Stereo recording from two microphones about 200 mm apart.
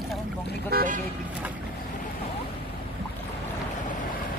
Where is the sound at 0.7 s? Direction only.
40° right (ahead or behind).